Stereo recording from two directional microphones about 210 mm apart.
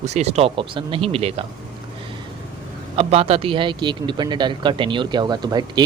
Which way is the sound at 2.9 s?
25° right (ahead or behind).